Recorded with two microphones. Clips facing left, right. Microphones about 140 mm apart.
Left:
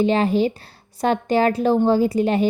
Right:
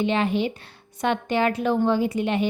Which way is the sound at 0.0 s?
35° left (ahead or behind).